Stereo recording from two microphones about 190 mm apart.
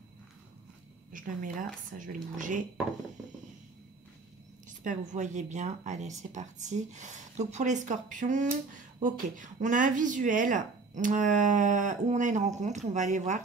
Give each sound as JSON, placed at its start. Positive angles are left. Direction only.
{"t": 1.1, "sound": "speech", "side_deg": -45}
{"t": 4.6, "sound": "speech", "side_deg": -40}